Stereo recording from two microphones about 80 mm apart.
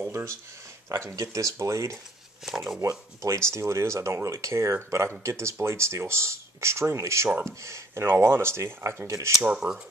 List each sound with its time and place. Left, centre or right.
0.0 s a sound: right
0.8 s speech: right
9.4 s speech: centre